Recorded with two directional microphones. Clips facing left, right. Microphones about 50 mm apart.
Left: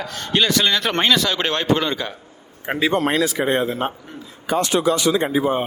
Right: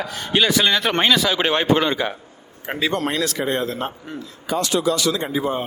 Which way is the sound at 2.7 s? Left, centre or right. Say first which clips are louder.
Left 3 dB; centre.